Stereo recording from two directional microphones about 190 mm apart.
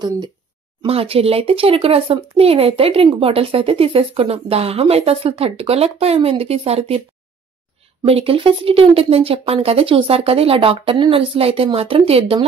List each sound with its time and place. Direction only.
0.8 s speech: 30° right (ahead or behind)
8.0 s speech: 30° right (ahead or behind)